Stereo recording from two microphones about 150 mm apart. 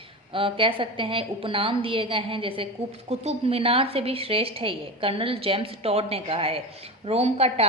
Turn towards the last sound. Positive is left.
turn(degrees=-45)  # may be behind; listen again after turning